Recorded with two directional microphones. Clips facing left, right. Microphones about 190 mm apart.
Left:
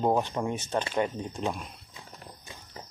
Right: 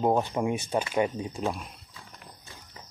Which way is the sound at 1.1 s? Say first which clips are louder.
Right 1 dB; centre (ahead or behind).